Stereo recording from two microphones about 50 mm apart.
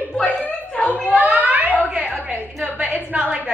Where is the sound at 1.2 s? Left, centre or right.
Right.